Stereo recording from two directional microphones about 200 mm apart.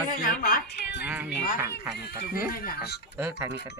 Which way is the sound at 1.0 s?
10° right (ahead or behind).